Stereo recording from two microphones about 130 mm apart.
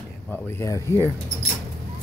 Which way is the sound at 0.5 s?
25° left (ahead or behind).